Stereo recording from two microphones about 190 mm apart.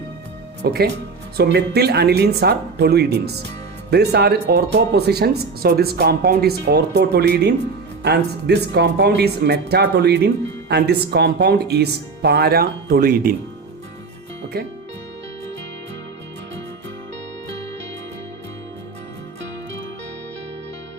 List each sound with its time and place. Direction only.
0.6 s speech: 60° right (ahead or behind)
14.5 s speech: 55° right (ahead or behind)